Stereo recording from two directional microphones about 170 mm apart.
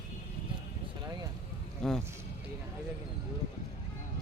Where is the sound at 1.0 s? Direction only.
25° right (ahead or behind).